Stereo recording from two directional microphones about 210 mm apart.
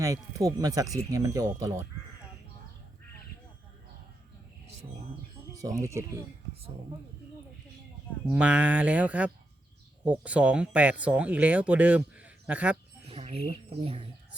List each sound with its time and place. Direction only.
0.0 s speech: 15° right (ahead or behind)
5.5 s speech: 15° right (ahead or behind)
8.2 s speech: 5° right (ahead or behind)
13.1 s speech: 30° right (ahead or behind)